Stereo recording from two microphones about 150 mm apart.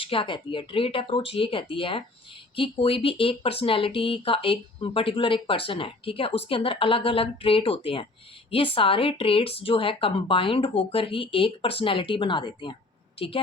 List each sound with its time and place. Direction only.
0.0 s a woman's voice: 35° left (ahead or behind)